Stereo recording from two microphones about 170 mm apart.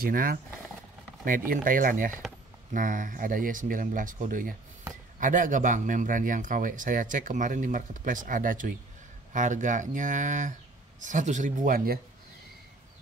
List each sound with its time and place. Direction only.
0.0 s speech: 55° right (ahead or behind)
1.5 s speech: 55° right (ahead or behind)